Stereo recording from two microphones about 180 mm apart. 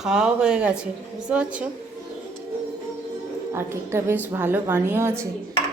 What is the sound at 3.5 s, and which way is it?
A woman's voice, 15° right (ahead or behind).